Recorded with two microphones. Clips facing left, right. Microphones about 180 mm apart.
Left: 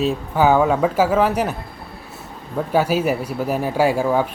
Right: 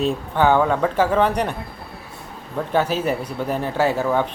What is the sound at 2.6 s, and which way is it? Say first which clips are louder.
Speech: left 2 dB; 10° left (ahead or behind).